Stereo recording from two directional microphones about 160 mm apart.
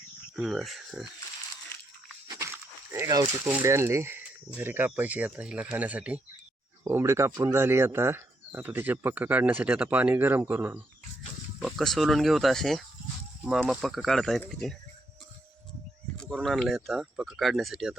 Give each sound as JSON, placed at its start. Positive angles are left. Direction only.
{"t": 0.3, "sound": "speech", "side_deg": 0}
{"t": 2.2, "sound": "dog", "side_deg": -25}
{"t": 2.9, "sound": "speech", "side_deg": -20}
{"t": 11.6, "sound": "speech", "side_deg": 0}
{"t": 16.4, "sound": "speech", "side_deg": 0}